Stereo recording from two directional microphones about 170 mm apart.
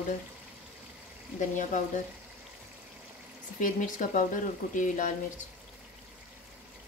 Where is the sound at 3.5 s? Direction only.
50° left (ahead or behind).